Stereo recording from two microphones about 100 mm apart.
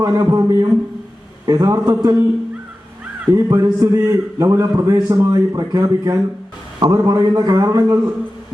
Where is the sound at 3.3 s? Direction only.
35° right (ahead or behind).